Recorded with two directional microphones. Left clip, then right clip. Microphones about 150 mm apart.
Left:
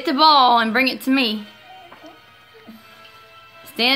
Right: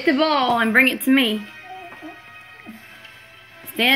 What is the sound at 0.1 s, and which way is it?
Speech, 30° left (ahead or behind).